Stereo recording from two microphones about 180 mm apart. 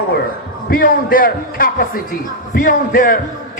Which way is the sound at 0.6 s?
50° left (ahead or behind).